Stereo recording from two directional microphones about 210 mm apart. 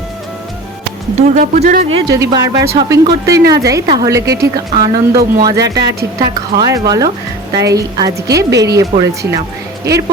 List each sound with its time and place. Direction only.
1.1 s speech: 30° right (ahead or behind)
2.1 s a woman's voice: 15° right (ahead or behind)